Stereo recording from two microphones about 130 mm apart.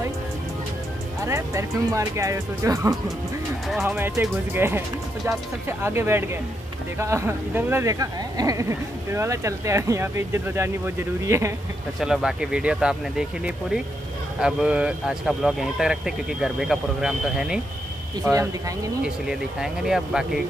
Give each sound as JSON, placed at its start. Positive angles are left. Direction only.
{"t": 1.2, "sound": "speech", "side_deg": -20}
{"t": 12.0, "sound": "speech", "side_deg": -5}
{"t": 14.4, "sound": "speech", "side_deg": -10}
{"t": 19.0, "sound": "speech", "side_deg": -5}